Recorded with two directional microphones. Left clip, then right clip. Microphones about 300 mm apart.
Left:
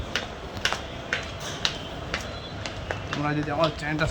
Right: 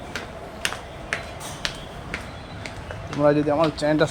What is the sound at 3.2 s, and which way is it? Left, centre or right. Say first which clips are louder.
Speech: right 7 dB; centre.